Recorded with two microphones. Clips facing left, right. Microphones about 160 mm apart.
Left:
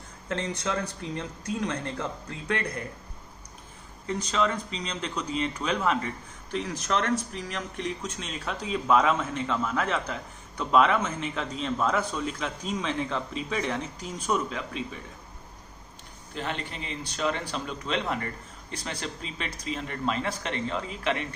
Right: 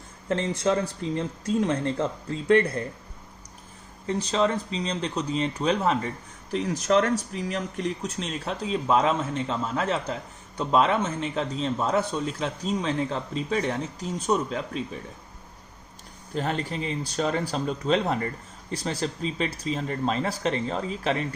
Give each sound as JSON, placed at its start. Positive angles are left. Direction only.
{"t": 0.3, "sound": "speech", "side_deg": -25}
{"t": 4.0, "sound": "a man's voice", "side_deg": -35}
{"t": 16.3, "sound": "a man's voice", "side_deg": -40}